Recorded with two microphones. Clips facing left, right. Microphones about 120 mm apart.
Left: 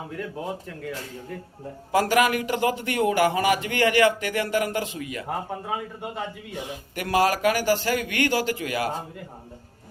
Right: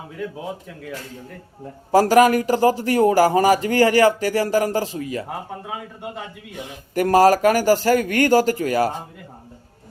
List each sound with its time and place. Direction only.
0.2 s speech: centre (ahead or behind)
1.9 s speech: 35° right (ahead or behind)
5.6 s speech: centre (ahead or behind)
6.9 s speech: 40° right (ahead or behind)